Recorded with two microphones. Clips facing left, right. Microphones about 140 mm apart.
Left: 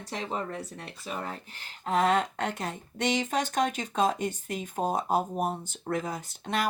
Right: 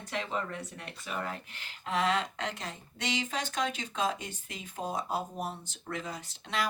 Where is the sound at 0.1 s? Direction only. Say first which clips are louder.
Left 1 dB; 35° left (ahead or behind).